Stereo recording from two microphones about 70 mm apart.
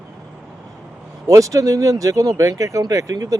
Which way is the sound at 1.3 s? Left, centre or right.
Right.